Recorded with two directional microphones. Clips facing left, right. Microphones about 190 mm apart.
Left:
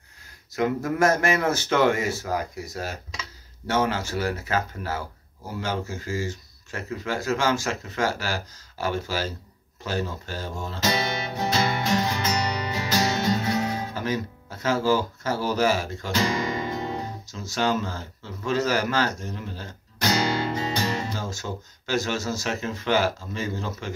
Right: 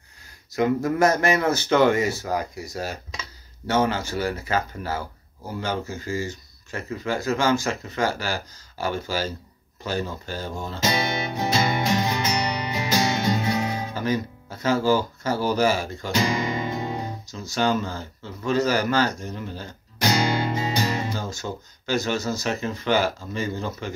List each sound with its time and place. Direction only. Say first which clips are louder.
0.6 s speech: right 2 dB; 5° left (ahead or behind)
11.3 s music: right 1 dB; 15° right (ahead or behind)
13.9 s speech: right 3 dB; 5° left (ahead or behind)
16.1 s music: right 1 dB; 15° right (ahead or behind)
17.3 s speech: right 2 dB; 5° left (ahead or behind)
20.0 s music: right 1 dB; 15° right (ahead or behind)
21.2 s speech: right 1 dB; 5° left (ahead or behind)